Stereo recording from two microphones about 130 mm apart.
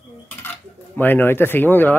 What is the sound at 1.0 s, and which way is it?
Speech, 15° left (ahead or behind).